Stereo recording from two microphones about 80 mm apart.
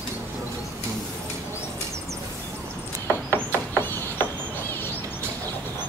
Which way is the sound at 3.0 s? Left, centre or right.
Left.